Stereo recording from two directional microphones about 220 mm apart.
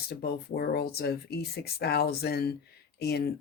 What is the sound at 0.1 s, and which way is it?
Speech, 45° left (ahead or behind).